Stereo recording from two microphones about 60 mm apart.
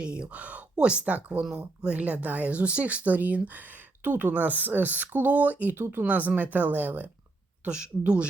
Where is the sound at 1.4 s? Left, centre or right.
Centre; by 7.1 s right.